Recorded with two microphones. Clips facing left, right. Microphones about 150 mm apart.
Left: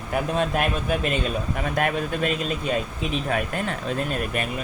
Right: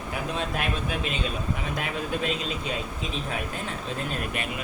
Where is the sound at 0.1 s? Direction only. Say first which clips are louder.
Left 7 dB; 50° left (ahead or behind).